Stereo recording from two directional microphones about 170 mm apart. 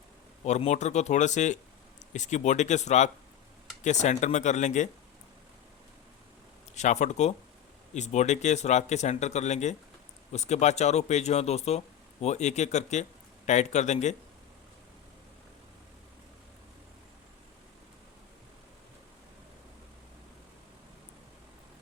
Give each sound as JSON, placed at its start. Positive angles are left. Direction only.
{"t": 0.4, "sound": "speech", "side_deg": 40}
{"t": 6.7, "sound": "speech", "side_deg": 45}